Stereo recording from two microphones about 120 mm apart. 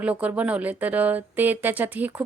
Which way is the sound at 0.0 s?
10° right (ahead or behind).